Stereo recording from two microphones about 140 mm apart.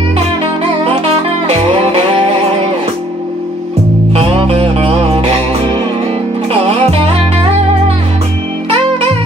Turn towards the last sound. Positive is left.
turn(degrees=-45)  # may be behind; listen again after turning